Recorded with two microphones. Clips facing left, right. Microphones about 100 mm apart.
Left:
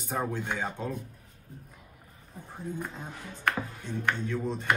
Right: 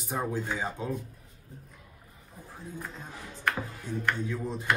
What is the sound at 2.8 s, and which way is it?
Speech, 20° left (ahead or behind).